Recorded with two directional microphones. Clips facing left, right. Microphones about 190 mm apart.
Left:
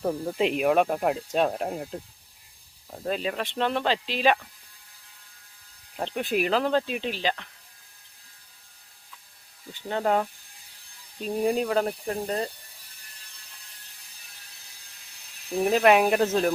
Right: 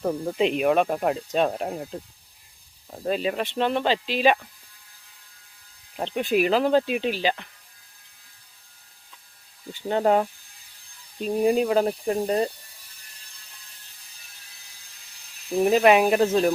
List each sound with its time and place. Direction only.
0.0 s speech: 5° left (ahead or behind)
6.1 s speech: centre (ahead or behind)
9.9 s speech: 20° right (ahead or behind)
11.2 s speech: 5° right (ahead or behind)
15.6 s speech: 5° right (ahead or behind)